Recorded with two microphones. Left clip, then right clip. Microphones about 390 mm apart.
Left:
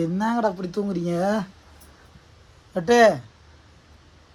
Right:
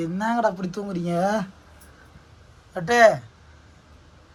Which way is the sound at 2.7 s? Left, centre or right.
Centre.